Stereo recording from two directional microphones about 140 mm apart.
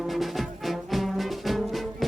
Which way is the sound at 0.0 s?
Centre (ahead or behind).